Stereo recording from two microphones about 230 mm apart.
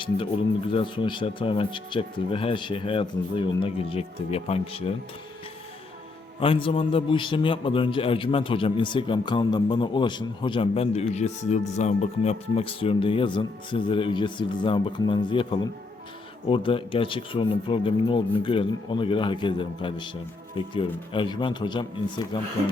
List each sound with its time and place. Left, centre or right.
0.7 s a man's voice: left
6.4 s a man's voice: left
16.5 s a man's voice: left